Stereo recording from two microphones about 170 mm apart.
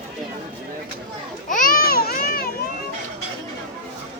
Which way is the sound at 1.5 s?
55° left (ahead or behind).